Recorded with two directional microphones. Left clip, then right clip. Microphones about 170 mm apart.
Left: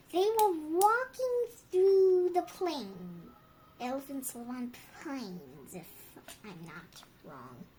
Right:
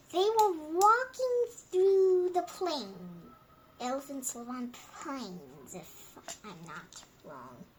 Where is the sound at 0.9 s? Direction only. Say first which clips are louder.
Right 3 dB; 30° left (ahead or behind).